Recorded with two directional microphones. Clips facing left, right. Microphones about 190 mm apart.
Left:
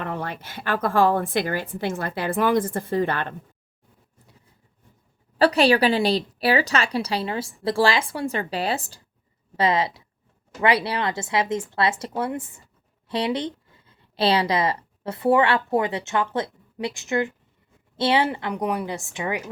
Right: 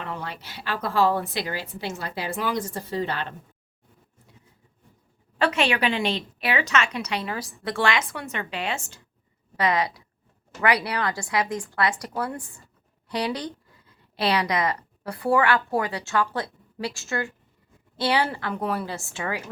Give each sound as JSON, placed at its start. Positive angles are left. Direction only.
{"t": 0.0, "sound": "a woman's voice", "side_deg": 50}
{"t": 5.4, "sound": "a woman's voice", "side_deg": 35}